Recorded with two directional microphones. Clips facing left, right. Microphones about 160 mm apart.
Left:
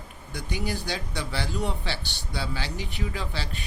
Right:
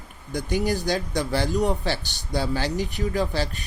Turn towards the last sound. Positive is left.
turn(degrees=-45)  # may be behind; listen again after turning